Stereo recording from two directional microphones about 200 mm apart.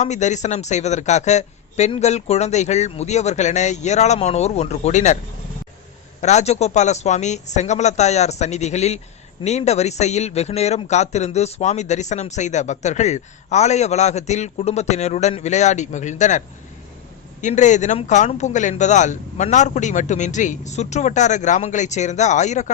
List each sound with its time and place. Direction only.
0.0 s a man's voice: 35° left (ahead or behind)
6.2 s a man's voice: 35° left (ahead or behind)
17.4 s a man's voice: 35° left (ahead or behind)